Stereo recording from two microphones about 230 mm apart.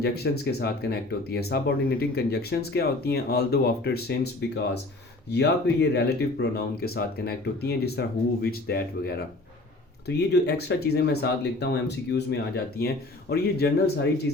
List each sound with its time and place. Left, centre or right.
0.0 s speech: left
10.4 s speech: left